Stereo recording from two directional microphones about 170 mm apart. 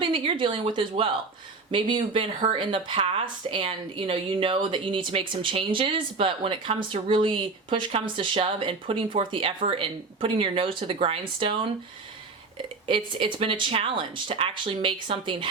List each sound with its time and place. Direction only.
0.0 s speech: 30° right (ahead or behind)
12.9 s speech: 30° right (ahead or behind)